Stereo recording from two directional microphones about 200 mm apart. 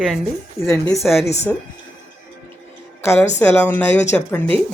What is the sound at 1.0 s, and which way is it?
Speech, centre (ahead or behind).